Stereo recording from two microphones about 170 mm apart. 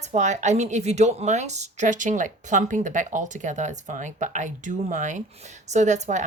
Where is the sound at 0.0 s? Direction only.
45° right (ahead or behind).